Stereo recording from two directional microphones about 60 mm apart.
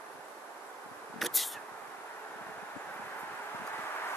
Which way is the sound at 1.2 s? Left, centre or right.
Centre.